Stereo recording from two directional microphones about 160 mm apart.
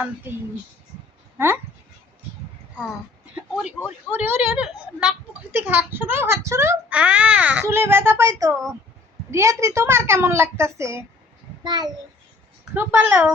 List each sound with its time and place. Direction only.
1.4 s speech: 15° right (ahead or behind)
3.5 s a child's voice: 5° right (ahead or behind); by 11.9 s 25° right (ahead or behind)
12.7 s speech: 15° right (ahead or behind)